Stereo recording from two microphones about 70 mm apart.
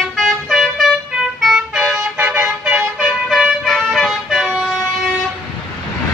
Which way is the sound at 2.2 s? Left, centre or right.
Right.